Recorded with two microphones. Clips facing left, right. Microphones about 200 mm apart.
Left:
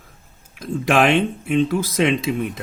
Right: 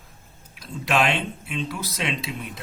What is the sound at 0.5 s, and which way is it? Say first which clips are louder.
Speech: left 6 dB; 50° left (ahead or behind).